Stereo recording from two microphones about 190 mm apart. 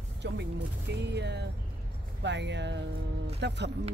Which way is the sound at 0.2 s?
65° right (ahead or behind).